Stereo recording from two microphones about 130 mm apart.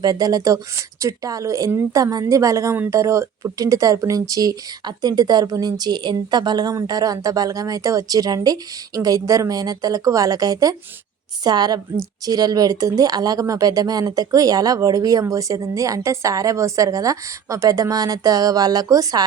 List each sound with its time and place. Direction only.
0.0 s a woman's voice: 30° right (ahead or behind)